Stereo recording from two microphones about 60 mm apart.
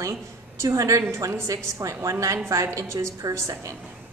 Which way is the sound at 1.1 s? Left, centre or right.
Right.